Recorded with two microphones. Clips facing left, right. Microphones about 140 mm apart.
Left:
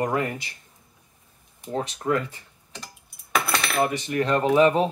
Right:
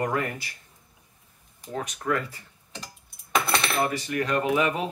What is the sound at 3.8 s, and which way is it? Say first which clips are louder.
Speech: left 3 dB; 20° left (ahead or behind).